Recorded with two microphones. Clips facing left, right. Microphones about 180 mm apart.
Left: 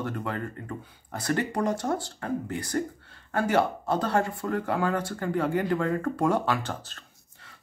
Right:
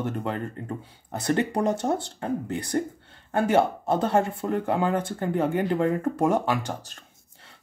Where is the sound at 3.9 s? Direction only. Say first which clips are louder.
Right 4 dB; 20° right (ahead or behind).